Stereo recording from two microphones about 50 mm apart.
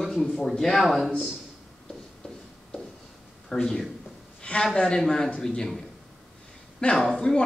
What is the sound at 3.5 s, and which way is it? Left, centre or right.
Speech, centre.